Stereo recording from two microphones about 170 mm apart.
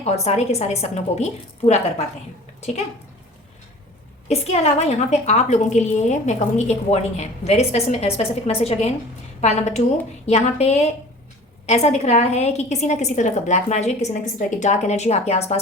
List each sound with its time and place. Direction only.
0.0 s a woman's voice: 40° left (ahead or behind)
4.3 s a woman's voice: 40° left (ahead or behind)